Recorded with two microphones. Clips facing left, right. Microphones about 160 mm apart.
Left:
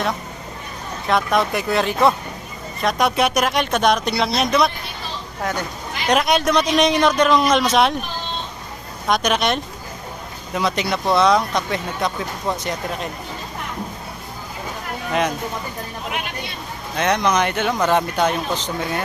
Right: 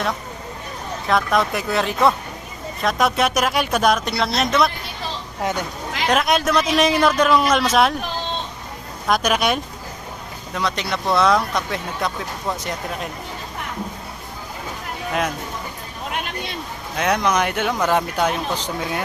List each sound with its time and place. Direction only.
1.0 s speech: centre (ahead or behind)
5.4 s speech: 20° right (ahead or behind)
6.1 s speech: centre (ahead or behind)
9.0 s speech: 5° right (ahead or behind)
10.5 s speech: 5° left (ahead or behind)
17.0 s speech: 5° right (ahead or behind)